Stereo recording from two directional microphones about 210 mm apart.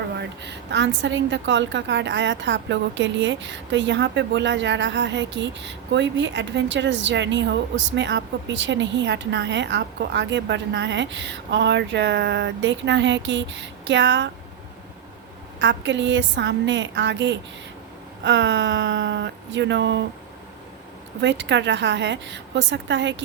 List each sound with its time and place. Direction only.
0.1 s a woman's voice: 55° right (ahead or behind)
15.6 s a woman's voice: 60° right (ahead or behind)
21.2 s a woman's voice: 60° right (ahead or behind)